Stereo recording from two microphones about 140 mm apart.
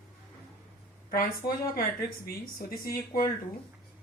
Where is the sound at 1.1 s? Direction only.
90° left.